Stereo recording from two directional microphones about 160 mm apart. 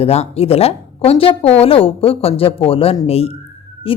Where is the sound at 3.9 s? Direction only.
35° left (ahead or behind).